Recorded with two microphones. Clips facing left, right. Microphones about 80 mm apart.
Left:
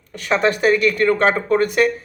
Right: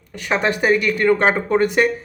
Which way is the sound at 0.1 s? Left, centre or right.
Centre.